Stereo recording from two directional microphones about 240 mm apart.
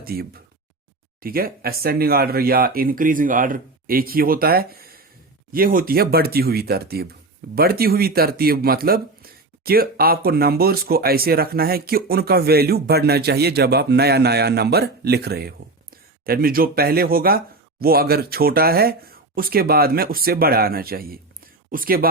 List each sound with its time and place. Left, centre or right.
0.0 s speech: right